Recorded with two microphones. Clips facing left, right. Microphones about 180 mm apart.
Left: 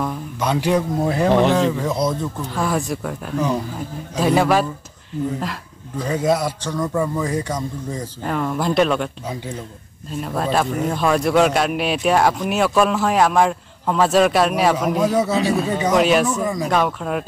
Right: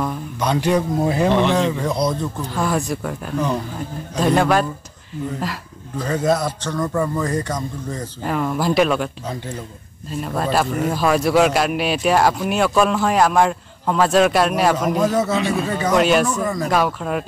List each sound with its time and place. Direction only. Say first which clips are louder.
0.0 s speech: even; centre (ahead or behind)
6.0 s speech: even; 10° left (ahead or behind)
8.2 s speech: right 1 dB; 5° right (ahead or behind)
10.2 s speech: even; centre (ahead or behind)
15.3 s speech: left 1 dB; 35° left (ahead or behind)
15.9 s speech: even; centre (ahead or behind)